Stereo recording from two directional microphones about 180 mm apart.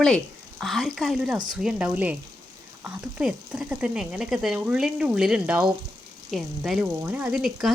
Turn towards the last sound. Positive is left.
turn(degrees=0)  # may be behind; listen again after turning